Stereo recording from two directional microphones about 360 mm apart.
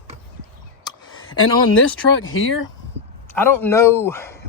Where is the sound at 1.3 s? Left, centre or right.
Left.